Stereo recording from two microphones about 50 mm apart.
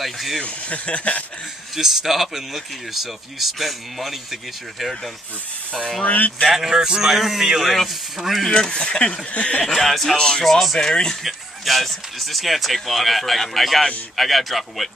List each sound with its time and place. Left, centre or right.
0.0 s speech: centre
0.4 s speech: left
1.8 s speech: centre
6.0 s speech: left
6.7 s speech: centre
8.5 s speech: centre
9.7 s speech: centre
10.1 s speech: centre
10.4 s speech: centre
11.2 s speech: centre